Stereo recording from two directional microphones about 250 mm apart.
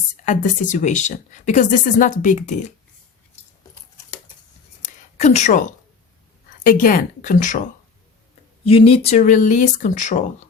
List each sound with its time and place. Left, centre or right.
0.3 s speech: left
5.1 s speech: left